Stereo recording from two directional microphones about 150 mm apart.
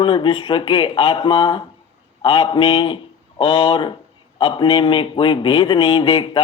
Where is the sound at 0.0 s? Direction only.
35° left (ahead or behind).